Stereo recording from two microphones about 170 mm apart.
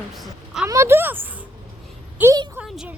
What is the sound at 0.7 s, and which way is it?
A woman's voice, 15° right (ahead or behind).